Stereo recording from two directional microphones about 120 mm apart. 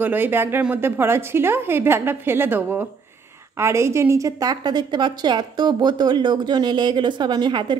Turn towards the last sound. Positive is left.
turn(degrees=-40)  # may be behind; listen again after turning